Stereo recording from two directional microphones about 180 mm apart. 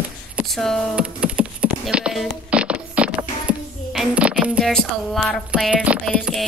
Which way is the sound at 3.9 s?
5° right (ahead or behind).